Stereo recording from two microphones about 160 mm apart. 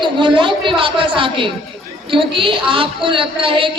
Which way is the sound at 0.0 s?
30° right (ahead or behind).